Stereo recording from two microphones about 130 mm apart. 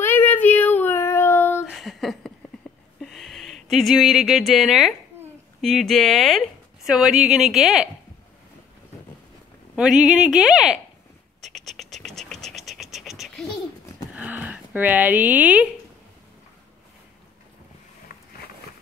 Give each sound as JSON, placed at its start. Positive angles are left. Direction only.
{"t": 0.0, "sound": "child singing", "side_deg": 15}
{"t": 1.7, "sound": "a sound", "side_deg": 0}
{"t": 3.0, "sound": "speech", "side_deg": 0}
{"t": 9.8, "sound": "speech", "side_deg": -5}
{"t": 11.4, "sound": "scratch", "side_deg": 0}
{"t": 14.1, "sound": "a sound", "side_deg": -10}